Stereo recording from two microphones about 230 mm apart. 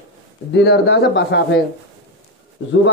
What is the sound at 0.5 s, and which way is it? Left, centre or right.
A man's voice, left.